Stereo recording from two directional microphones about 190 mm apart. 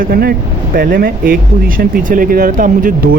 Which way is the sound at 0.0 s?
50° right (ahead or behind).